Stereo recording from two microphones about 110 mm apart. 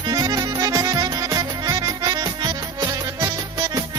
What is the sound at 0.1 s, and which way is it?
Music, 35° right (ahead or behind).